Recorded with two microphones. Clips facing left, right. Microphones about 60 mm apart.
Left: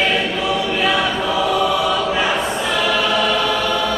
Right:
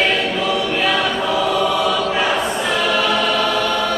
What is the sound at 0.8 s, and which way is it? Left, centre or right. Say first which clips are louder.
Choir: left 1 dB; centre.